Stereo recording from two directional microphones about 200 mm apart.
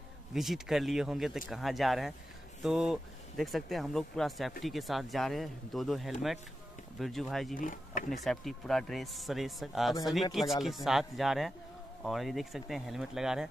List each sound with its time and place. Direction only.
0.3 s speech: centre (ahead or behind)
7.5 s speech: 40° left (ahead or behind)
8.1 s speech: centre (ahead or behind)